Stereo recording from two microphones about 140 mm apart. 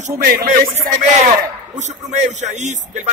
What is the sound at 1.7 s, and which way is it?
A man's voice, 60° right (ahead or behind).